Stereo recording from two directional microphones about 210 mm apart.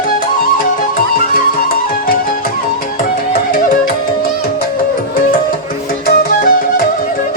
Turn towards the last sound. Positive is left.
turn(degrees=45)  # may be behind; listen again after turning